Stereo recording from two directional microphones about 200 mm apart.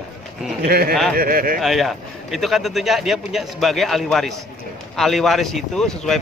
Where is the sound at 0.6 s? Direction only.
50° right (ahead or behind).